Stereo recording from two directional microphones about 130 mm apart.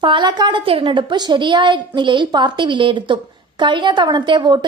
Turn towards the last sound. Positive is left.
turn(degrees=-35)  # may be behind; listen again after turning